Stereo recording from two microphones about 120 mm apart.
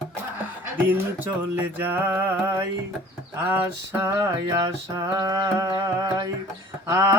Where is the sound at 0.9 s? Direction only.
15° right (ahead or behind).